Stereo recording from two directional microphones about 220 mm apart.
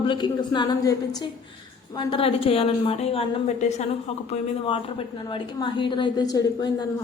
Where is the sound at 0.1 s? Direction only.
20° left (ahead or behind).